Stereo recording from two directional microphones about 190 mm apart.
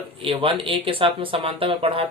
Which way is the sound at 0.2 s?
25° right (ahead or behind).